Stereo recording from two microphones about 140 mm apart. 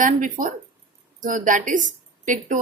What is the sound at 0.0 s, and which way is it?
A woman's voice, 70° right (ahead or behind).